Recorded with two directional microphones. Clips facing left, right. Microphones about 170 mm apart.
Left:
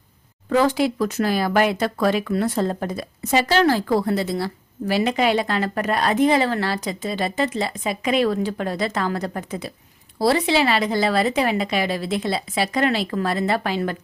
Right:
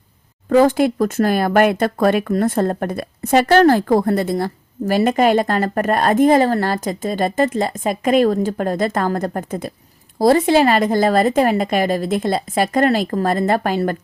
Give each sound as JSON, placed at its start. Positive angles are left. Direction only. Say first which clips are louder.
{"t": 0.5, "sound": "speech", "louder": "right 5 dB", "side_deg": -50}